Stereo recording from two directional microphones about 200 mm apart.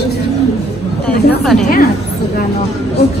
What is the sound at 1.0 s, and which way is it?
Speech, centre (ahead or behind).